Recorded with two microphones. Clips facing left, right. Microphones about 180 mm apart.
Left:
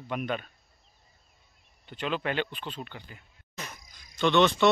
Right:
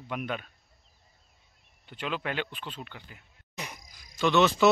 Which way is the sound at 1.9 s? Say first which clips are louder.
Left 3 dB; 5° right (ahead or behind).